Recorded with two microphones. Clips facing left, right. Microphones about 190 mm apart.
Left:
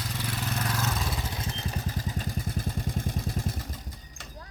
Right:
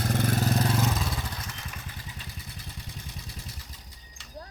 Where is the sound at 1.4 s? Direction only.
30° left (ahead or behind); by 3.7 s 50° left (ahead or behind).